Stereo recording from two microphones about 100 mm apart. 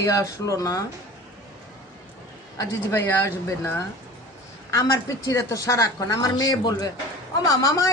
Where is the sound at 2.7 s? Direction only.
25° left (ahead or behind).